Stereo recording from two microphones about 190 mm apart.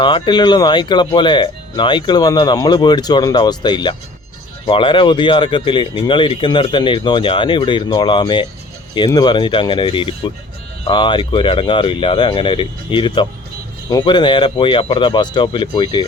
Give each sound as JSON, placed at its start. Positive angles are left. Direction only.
{"t": 0.0, "sound": "speech", "side_deg": 25}